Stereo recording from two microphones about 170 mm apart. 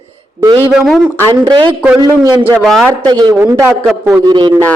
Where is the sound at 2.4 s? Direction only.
Centre (ahead or behind).